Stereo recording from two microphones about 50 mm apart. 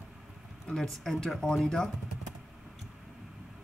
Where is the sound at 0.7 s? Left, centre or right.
Centre.